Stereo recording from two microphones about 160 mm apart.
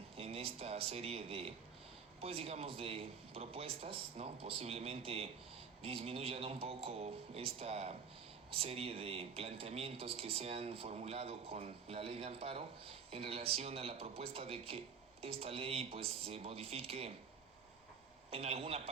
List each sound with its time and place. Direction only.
0.2 s speech: 40° right (ahead or behind)
18.3 s speech: 40° right (ahead or behind)